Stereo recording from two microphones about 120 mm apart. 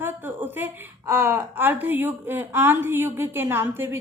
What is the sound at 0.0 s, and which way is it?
A woman's voice, 15° right (ahead or behind).